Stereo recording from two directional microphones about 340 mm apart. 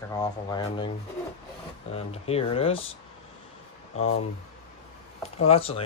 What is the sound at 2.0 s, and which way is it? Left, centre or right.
Speech, centre.